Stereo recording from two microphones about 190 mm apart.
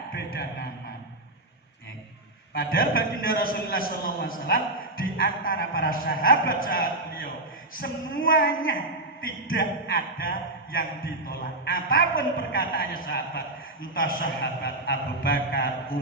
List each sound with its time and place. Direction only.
2.5 s a man's voice: 50° left (ahead or behind)